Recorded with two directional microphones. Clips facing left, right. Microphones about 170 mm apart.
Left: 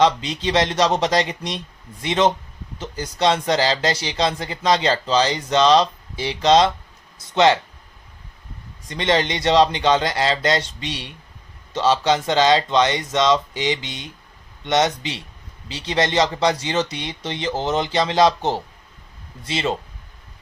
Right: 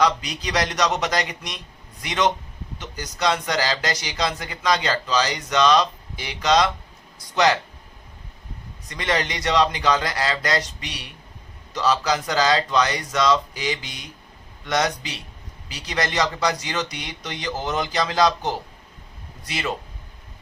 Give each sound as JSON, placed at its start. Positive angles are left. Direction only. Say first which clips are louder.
{"t": 0.0, "sound": "speech", "louder": "left 4 dB", "side_deg": 25}
{"t": 8.9, "sound": "speech", "louder": "left 5 dB", "side_deg": 25}